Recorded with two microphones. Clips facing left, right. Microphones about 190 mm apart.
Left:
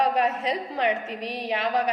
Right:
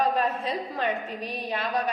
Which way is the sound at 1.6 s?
20° left (ahead or behind).